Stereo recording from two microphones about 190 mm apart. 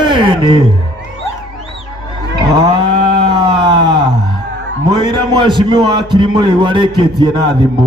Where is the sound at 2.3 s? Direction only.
25° right (ahead or behind).